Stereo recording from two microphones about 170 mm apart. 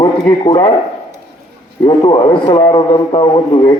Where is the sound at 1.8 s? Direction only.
30° left (ahead or behind).